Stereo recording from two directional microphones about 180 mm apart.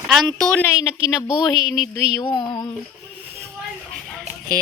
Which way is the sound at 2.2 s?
25° left (ahead or behind).